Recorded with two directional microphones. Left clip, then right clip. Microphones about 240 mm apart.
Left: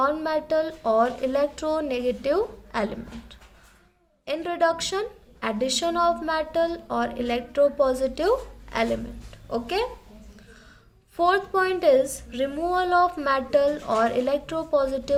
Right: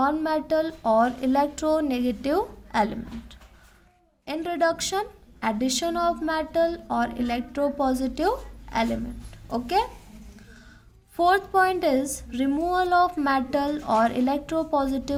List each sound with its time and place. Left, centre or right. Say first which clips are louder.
0.0 s a woman's voice: even; right
11.2 s a woman's voice: right 1 dB; right